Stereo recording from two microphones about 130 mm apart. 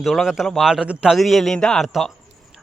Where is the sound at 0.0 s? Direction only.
Centre (ahead or behind).